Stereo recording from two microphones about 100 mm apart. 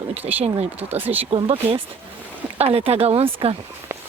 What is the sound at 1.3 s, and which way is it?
Speech, 65° right (ahead or behind).